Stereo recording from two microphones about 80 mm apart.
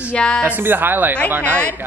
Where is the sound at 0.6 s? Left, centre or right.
Right.